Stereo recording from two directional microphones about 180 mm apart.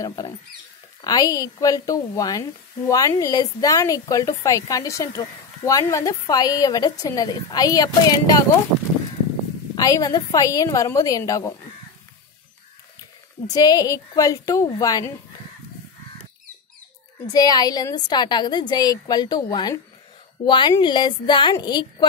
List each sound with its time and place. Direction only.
0.0 s a woman's voice: 20° left (ahead or behind)
9.8 s a woman's voice: 20° left (ahead or behind)
13.5 s a woman's voice: 20° left (ahead or behind)
17.3 s a woman's voice: 20° left (ahead or behind)